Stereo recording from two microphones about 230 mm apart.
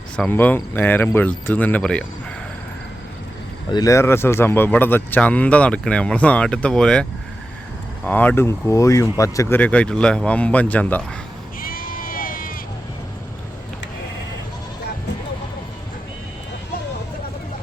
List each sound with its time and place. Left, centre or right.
0.2 s speech: centre
3.7 s speech: centre
11.6 s sheep: left